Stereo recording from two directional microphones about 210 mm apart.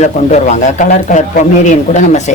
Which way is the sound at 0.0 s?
35° left (ahead or behind).